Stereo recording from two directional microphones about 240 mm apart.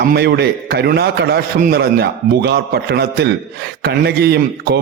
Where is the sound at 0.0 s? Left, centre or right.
Right.